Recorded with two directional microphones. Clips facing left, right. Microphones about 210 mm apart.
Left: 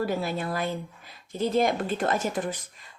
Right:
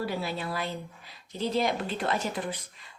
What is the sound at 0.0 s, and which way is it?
A woman's voice, 50° left (ahead or behind).